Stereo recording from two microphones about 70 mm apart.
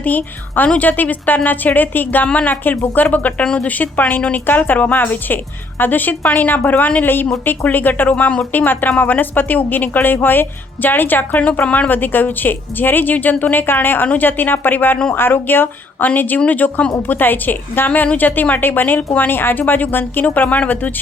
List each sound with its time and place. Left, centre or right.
0.0 s a woman's voice: left
3.4 s a woman's voice: centre
3.8 s a woman's voice: left